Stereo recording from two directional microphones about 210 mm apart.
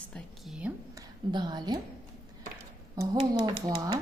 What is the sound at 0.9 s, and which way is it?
Speech, 20° right (ahead or behind).